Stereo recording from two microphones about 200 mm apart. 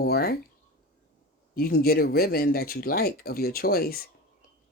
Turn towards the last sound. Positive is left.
turn(degrees=50)  # may be behind; listen again after turning